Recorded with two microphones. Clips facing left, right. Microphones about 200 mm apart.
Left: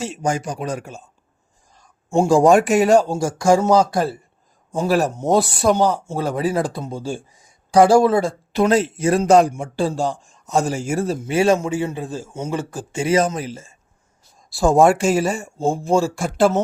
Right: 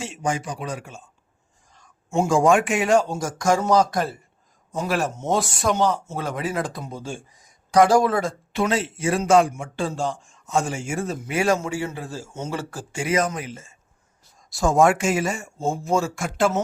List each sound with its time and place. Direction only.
0.0 s a man's voice: 40° left (ahead or behind)